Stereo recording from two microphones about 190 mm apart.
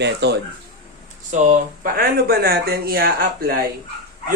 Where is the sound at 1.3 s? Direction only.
40° right (ahead or behind).